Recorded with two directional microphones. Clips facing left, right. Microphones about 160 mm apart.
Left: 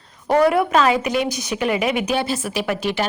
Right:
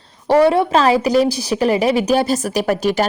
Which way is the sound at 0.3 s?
30° right (ahead or behind).